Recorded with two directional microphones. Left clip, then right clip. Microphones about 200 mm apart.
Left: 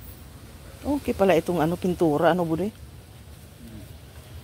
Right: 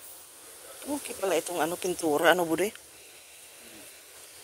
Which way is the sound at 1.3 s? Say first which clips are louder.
Left 3 dB; 20° left (ahead or behind).